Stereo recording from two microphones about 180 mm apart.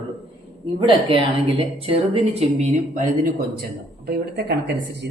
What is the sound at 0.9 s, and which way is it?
A woman's voice, 30° right (ahead or behind).